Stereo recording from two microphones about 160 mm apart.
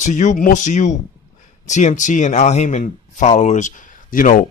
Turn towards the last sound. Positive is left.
turn(degrees=60)  # may be behind; listen again after turning